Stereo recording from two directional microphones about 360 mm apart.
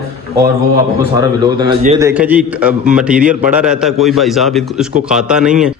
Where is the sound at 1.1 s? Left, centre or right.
Centre.